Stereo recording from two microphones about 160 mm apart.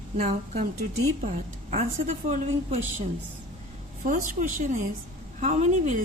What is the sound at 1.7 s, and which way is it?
A woman's voice, 50° right (ahead or behind).